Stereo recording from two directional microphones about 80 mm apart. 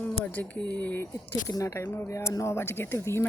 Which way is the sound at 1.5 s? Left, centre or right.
Left.